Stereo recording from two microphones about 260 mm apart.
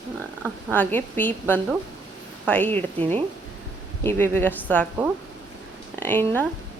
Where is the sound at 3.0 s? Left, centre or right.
Centre.